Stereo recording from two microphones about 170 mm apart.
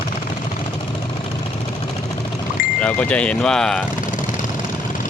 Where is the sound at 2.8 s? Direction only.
5° left (ahead or behind).